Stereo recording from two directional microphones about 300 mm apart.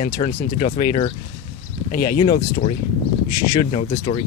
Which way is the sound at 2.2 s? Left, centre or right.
Left.